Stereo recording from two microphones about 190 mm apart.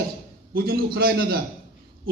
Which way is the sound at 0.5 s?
50° right (ahead or behind).